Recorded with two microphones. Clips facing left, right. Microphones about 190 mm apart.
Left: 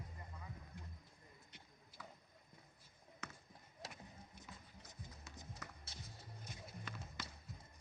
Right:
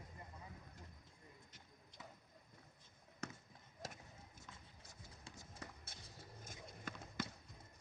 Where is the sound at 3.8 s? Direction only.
45° right (ahead or behind).